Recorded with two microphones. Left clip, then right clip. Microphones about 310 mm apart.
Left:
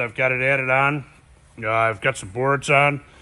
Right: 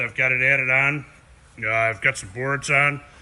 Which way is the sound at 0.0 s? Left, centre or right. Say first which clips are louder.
Right 1 dB; centre.